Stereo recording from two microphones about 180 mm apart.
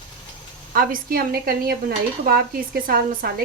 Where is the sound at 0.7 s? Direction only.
50° right (ahead or behind).